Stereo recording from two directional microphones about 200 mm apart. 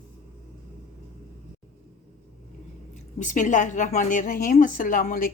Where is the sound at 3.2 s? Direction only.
40° left (ahead or behind).